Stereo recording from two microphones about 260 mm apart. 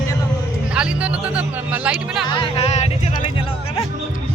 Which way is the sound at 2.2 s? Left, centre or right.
Centre.